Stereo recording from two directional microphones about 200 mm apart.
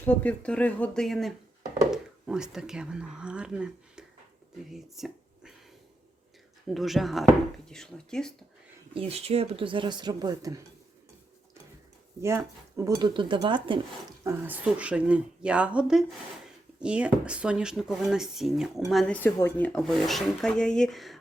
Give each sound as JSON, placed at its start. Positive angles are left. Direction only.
{"t": 0.0, "sound": "speech", "side_deg": 10}
{"t": 6.7, "sound": "speech", "side_deg": 0}
{"t": 9.0, "sound": "speech", "side_deg": -30}
{"t": 12.2, "sound": "speech", "side_deg": -15}
{"t": 14.3, "sound": "speech", "side_deg": -10}